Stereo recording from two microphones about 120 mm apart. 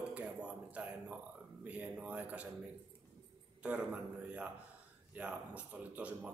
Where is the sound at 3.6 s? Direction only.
10° right (ahead or behind).